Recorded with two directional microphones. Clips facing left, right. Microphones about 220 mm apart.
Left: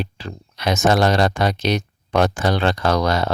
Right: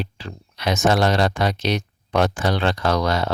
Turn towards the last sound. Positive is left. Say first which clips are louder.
# left 2 dB
turn(degrees=45)  # may be behind; listen again after turning